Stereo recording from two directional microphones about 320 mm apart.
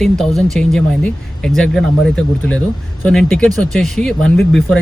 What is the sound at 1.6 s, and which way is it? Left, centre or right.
Speech, centre.